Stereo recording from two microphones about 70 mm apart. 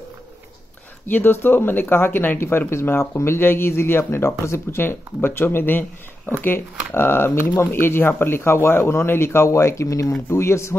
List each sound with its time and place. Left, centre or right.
1.0 s speech: left